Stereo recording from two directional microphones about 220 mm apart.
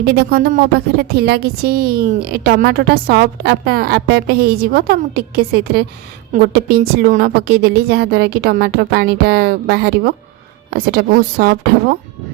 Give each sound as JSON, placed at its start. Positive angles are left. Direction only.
{"t": 0.0, "sound": "a woman's voice", "side_deg": -45}